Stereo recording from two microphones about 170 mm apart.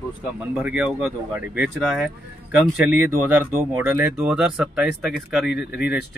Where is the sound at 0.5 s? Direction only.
10° right (ahead or behind).